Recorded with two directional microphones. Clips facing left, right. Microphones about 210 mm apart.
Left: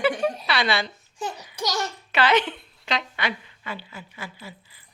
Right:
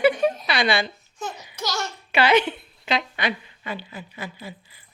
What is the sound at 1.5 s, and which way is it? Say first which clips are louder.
Babbling: left 2 dB; 15° left (ahead or behind).